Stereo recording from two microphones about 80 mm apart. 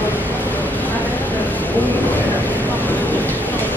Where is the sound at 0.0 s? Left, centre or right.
Left.